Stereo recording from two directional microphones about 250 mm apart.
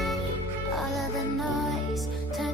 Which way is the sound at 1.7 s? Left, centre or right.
Centre.